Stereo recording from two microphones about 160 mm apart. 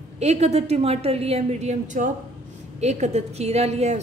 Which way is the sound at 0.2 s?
45° right (ahead or behind).